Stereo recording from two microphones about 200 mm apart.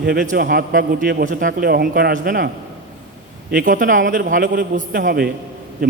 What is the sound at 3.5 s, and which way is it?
A man's voice, 45° right (ahead or behind).